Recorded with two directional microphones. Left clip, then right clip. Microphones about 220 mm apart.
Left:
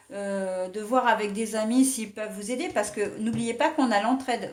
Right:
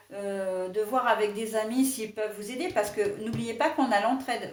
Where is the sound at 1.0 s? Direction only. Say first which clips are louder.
Left 1 dB; 40° left (ahead or behind).